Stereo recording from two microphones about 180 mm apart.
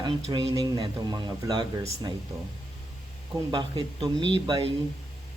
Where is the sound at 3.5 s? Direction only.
25° right (ahead or behind).